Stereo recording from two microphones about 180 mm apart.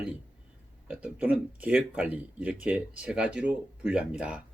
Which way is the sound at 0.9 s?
10° right (ahead or behind).